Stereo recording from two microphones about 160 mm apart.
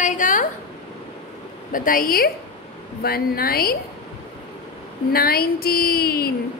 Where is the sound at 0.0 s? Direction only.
55° left (ahead or behind).